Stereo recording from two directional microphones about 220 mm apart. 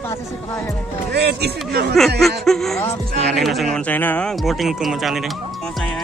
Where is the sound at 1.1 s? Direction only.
45° right (ahead or behind).